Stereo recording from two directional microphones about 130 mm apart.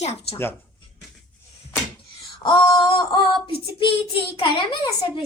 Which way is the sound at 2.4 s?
40° left (ahead or behind).